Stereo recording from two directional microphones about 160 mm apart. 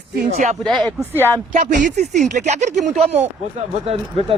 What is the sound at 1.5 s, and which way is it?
Speech, 50° right (ahead or behind).